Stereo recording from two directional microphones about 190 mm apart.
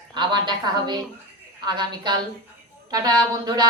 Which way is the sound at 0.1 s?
25° right (ahead or behind).